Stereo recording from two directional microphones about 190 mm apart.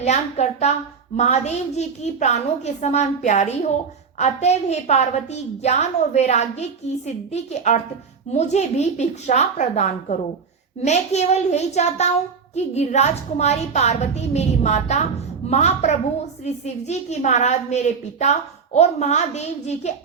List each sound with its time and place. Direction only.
0.0 s a woman's voice: 35° left (ahead or behind)